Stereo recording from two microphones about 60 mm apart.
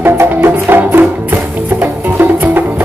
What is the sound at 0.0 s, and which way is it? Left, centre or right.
Music, right.